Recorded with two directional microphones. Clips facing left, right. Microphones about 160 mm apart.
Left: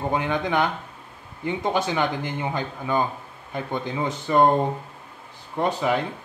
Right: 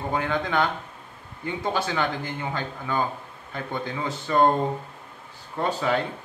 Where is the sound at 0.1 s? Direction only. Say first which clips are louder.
Even; 20° left (ahead or behind).